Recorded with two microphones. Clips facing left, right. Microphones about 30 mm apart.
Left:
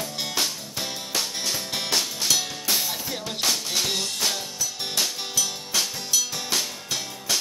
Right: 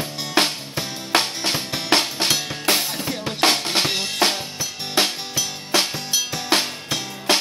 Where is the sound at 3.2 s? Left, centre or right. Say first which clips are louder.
Right 8 dB; right.